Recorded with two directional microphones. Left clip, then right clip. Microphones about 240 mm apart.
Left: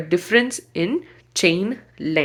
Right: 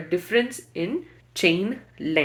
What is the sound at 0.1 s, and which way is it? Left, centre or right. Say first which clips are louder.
Speech: left 5 dB; left.